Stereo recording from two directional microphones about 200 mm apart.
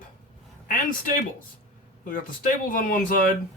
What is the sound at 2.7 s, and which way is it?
Speech, 45° left (ahead or behind).